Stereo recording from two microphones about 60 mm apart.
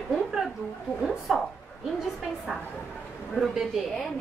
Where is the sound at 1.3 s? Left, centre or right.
Centre.